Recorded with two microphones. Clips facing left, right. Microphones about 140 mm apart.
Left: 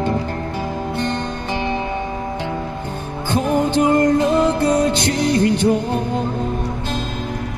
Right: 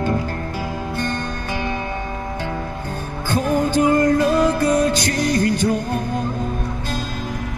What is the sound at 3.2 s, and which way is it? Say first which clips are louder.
Music: left 1 dB; 20° left (ahead or behind).